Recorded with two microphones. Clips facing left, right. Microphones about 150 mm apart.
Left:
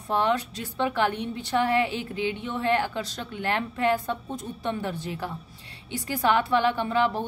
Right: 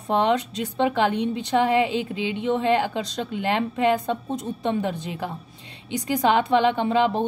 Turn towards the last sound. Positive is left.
turn(degrees=-20)  # may be behind; listen again after turning